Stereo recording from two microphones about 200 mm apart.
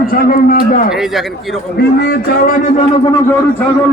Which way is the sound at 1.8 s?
55° left (ahead or behind).